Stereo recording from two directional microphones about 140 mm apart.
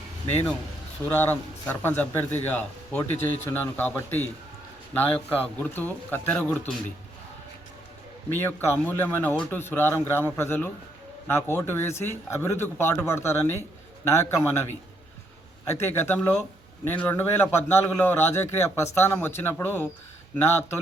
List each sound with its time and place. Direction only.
1.0 s a man's voice: 10° left (ahead or behind)
8.3 s a man's voice: 15° left (ahead or behind)
15.7 s a man's voice: 15° left (ahead or behind)